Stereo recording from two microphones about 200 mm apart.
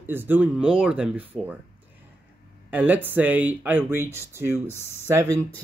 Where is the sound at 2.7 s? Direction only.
10° right (ahead or behind).